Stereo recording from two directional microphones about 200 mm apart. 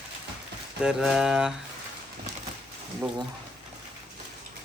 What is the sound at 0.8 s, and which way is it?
Mantra, 5° right (ahead or behind).